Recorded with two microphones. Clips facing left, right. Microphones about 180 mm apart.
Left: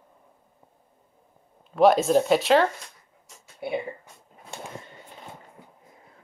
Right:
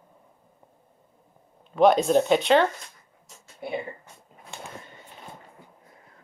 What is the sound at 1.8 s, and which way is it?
Speech, centre (ahead or behind).